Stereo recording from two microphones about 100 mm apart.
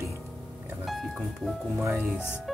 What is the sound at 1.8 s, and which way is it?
Speech, 25° right (ahead or behind).